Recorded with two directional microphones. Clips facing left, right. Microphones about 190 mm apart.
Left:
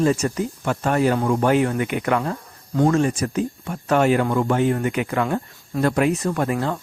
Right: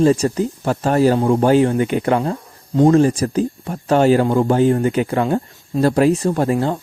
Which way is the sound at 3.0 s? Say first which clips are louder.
Right 5 dB; 35° right (ahead or behind).